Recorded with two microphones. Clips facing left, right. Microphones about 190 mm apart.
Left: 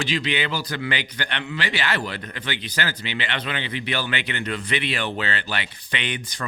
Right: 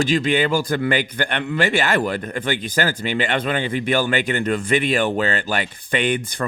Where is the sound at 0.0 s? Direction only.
45° right (ahead or behind).